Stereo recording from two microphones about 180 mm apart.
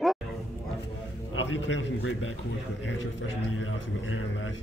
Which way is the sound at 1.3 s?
90° left.